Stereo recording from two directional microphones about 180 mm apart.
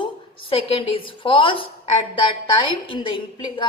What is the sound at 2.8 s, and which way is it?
Speech, 30° left (ahead or behind).